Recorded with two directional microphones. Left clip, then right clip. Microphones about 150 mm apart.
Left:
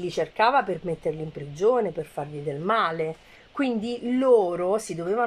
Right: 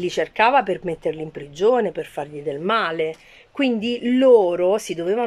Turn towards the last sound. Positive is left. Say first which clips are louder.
# right 6 dB
turn(degrees=-25)  # may be behind; listen again after turning